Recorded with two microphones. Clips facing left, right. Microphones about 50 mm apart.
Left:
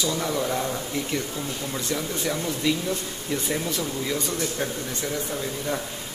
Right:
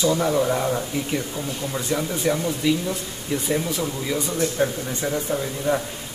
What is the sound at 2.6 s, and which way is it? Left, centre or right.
A man's voice, centre.